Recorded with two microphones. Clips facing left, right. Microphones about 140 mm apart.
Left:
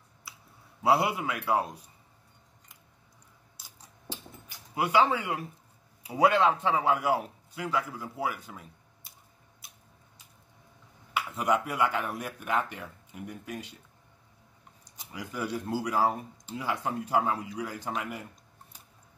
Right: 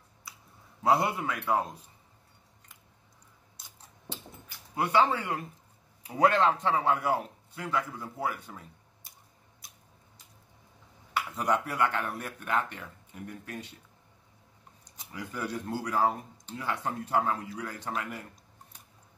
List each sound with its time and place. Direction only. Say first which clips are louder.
0.8 s speech: left 1 dB; 5° left (ahead or behind)
4.7 s speech: left 1 dB; 10° left (ahead or behind)
11.1 s speech: left 1 dB; 5° left (ahead or behind)
15.0 s speech: left 1 dB; 5° left (ahead or behind)